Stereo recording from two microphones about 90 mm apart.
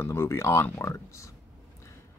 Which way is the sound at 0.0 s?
30° left (ahead or behind).